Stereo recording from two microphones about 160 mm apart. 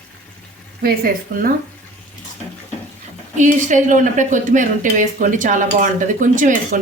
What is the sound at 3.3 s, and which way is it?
Speech, 50° right (ahead or behind).